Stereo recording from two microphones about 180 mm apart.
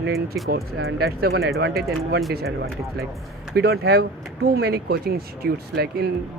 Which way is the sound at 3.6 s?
60° right (ahead or behind).